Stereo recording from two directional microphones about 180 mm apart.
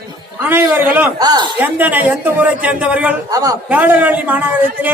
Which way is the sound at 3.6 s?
10° right (ahead or behind).